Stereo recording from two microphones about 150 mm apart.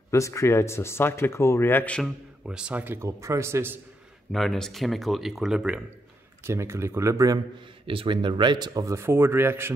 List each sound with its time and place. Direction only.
0.1 s speech: 20° left (ahead or behind)
2.4 s a man's voice: 5° right (ahead or behind)
4.3 s speech: centre (ahead or behind)
6.4 s speech: 20° right (ahead or behind)
7.8 s speech: 35° right (ahead or behind); by 9.7 s 15° right (ahead or behind)